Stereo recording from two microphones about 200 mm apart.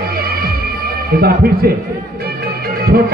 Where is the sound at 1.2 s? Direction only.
50° right (ahead or behind).